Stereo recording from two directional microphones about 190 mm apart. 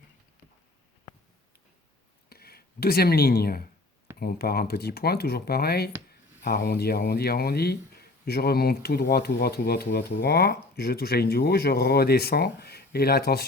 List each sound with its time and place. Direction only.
2.3 s speech: 55° left (ahead or behind)